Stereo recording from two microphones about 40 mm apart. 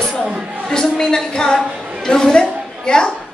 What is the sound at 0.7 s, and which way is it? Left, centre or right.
Speech, centre.